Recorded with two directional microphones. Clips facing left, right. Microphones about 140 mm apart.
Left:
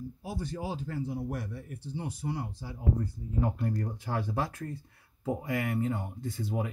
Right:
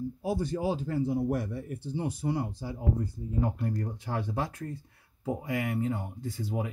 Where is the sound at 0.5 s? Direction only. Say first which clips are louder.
Right 5 dB; 35° right (ahead or behind).